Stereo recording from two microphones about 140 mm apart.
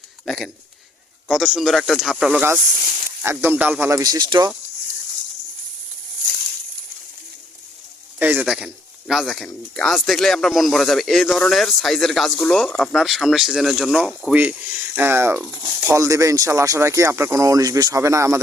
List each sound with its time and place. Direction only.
0.3 s speech: centre (ahead or behind)
3.2 s speech: 15° right (ahead or behind); by 4.5 s 30° right (ahead or behind)
8.2 s speech: 10° right (ahead or behind)